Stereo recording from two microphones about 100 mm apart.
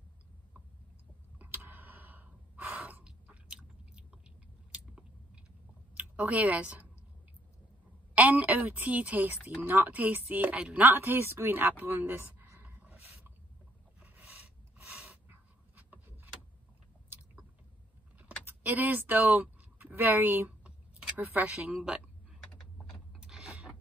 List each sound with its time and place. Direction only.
1.4 s gasp: 20° right (ahead or behind)
4.7 s chewing: 10° right (ahead or behind)
5.9 s speech: 15° right (ahead or behind)
8.1 s a woman's voice: 15° right (ahead or behind)
13.9 s pant: 15° right (ahead or behind)
18.4 s a sound: 20° right (ahead or behind)
21.2 s speech: 20° right (ahead or behind)
21.5 s a woman's voice: 10° right (ahead or behind)
23.2 s a sound: 10° right (ahead or behind)